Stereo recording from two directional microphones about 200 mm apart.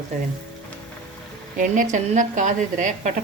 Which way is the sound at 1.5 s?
40° right (ahead or behind).